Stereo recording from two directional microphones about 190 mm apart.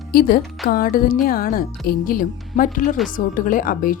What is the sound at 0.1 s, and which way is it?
Speech, 50° left (ahead or behind).